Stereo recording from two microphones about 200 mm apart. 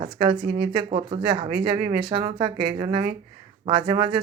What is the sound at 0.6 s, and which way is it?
Speech, 25° right (ahead or behind).